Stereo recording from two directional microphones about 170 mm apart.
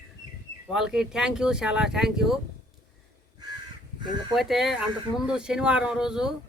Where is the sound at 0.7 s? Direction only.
5° right (ahead or behind).